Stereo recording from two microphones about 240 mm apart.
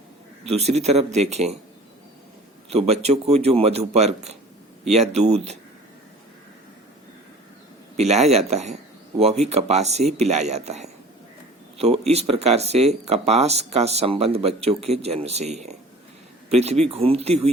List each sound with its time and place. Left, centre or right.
0.4 s speech: right
2.6 s speech: right
7.9 s speech: right